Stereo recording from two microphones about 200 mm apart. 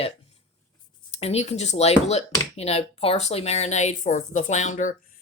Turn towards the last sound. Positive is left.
turn(degrees=40)  # may be behind; listen again after turning